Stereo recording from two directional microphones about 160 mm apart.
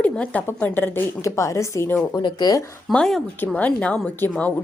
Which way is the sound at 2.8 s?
5° left (ahead or behind).